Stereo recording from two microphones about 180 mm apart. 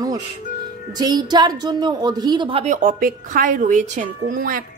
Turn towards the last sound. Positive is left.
turn(degrees=-50)  # may be behind; listen again after turning